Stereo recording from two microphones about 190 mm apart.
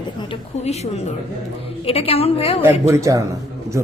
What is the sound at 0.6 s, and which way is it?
A woman's voice, 35° left (ahead or behind).